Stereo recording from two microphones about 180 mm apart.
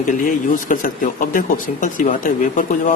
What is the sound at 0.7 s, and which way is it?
A man's voice, 50° left (ahead or behind).